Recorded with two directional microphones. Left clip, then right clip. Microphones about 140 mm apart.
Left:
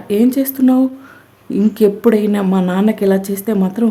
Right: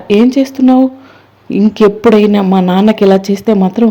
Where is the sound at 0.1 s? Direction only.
15° right (ahead or behind).